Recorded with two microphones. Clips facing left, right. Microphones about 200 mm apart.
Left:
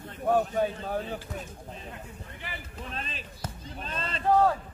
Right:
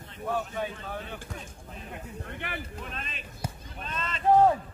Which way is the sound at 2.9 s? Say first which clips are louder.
Left 2 dB; 35° left (ahead or behind).